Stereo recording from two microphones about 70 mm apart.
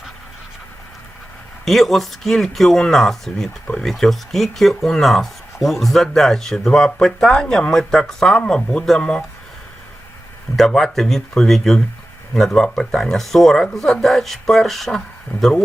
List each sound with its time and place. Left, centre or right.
1.6 s speech: centre
10.6 s speech: centre